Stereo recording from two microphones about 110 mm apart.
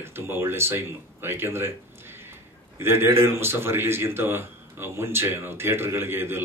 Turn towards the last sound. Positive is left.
turn(degrees=-20)  # may be behind; listen again after turning